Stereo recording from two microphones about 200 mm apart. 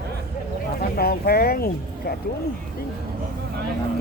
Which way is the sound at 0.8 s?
50° left (ahead or behind).